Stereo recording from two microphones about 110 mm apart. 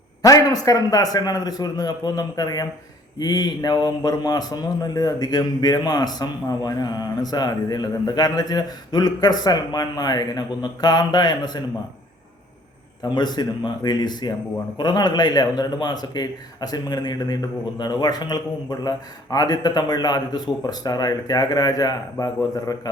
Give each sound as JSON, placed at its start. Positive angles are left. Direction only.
{"t": 0.2, "sound": "a man's voice", "side_deg": 35}
{"t": 13.0, "sound": "a man's voice", "side_deg": 40}